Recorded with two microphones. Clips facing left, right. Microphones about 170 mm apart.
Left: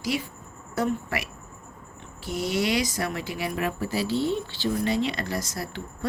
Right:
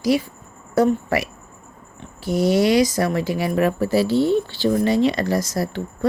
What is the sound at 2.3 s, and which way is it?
Speech, 40° right (ahead or behind).